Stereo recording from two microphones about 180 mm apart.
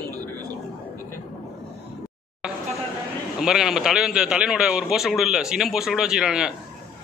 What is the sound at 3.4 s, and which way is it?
A man's voice, centre (ahead or behind).